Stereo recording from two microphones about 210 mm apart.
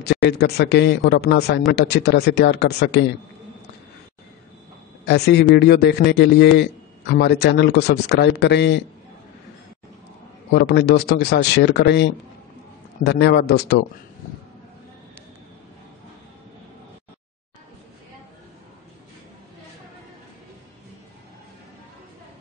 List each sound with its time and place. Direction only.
0.0 s speech: 50° left (ahead or behind)
5.0 s speech: 50° left (ahead or behind)
10.5 s speech: 55° left (ahead or behind)